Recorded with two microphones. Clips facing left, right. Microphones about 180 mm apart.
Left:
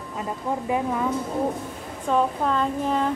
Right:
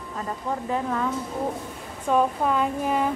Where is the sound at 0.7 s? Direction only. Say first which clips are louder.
Left 2 dB; 10° left (ahead or behind).